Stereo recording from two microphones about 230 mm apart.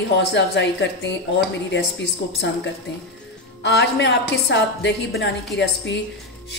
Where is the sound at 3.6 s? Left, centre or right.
Left.